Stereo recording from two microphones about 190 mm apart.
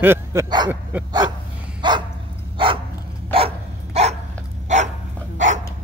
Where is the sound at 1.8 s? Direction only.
25° right (ahead or behind).